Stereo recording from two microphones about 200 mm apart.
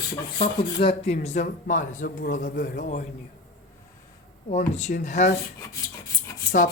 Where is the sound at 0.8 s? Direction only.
30° left (ahead or behind).